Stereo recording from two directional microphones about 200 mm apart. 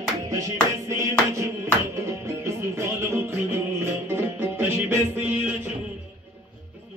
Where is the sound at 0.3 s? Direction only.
15° right (ahead or behind).